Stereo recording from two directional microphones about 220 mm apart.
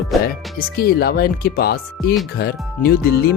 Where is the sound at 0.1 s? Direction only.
Centre (ahead or behind).